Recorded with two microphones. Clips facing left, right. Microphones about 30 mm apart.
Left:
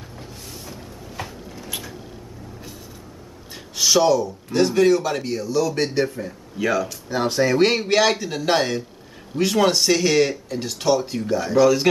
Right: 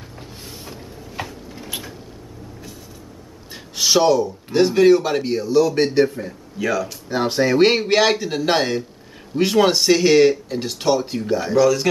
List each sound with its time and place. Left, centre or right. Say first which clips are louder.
1.2 s a sound: right 3 dB; right
1.7 s a sound: right 1 dB; centre
3.7 s speech: right 1 dB; centre
6.6 s speech: even; centre
7.1 s speech: right 2 dB; centre
11.5 s speech: even; centre